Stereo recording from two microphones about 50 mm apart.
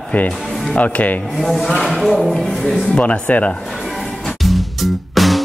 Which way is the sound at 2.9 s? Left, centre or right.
Left.